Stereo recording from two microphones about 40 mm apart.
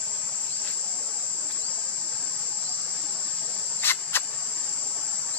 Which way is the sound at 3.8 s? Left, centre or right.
Left.